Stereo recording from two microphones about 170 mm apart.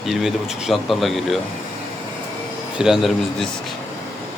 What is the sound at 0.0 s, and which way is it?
Speech, centre (ahead or behind).